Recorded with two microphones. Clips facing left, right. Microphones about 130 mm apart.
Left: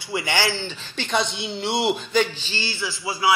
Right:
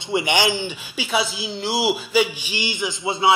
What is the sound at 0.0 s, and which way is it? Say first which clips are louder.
A man's voice: right 4 dB; 25° right (ahead or behind).